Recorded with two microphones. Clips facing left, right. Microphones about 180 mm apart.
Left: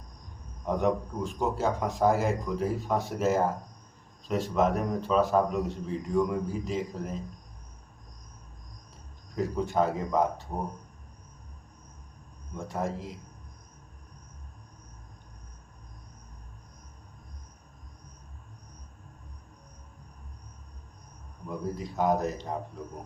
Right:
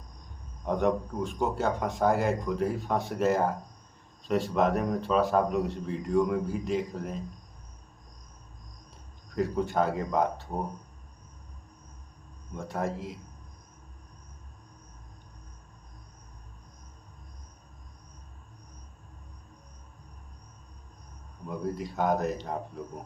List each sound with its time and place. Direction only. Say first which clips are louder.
0.6 s a man's voice: even; centre (ahead or behind)
9.3 s a man's voice: right 1 dB; centre (ahead or behind)
12.5 s a man's voice: even; centre (ahead or behind)
21.6 s a man's voice: even; centre (ahead or behind)